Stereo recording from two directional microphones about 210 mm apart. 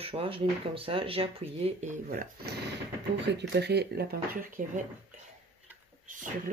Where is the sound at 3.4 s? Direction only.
55° right (ahead or behind).